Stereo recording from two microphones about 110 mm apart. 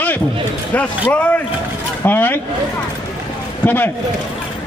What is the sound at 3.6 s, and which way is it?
Speech, 15° left (ahead or behind).